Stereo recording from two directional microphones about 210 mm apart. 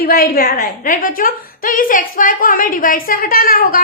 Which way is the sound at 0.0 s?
45° left (ahead or behind).